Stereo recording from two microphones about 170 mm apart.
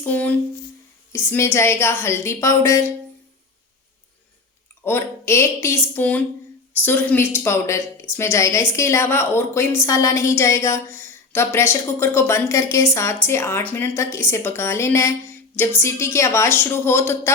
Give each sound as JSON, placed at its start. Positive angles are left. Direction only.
{"t": 0.0, "sound": "a woman's voice", "side_deg": 10}
{"t": 4.9, "sound": "a woman's voice", "side_deg": 15}